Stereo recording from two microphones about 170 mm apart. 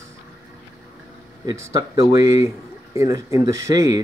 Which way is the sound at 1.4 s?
20° right (ahead or behind).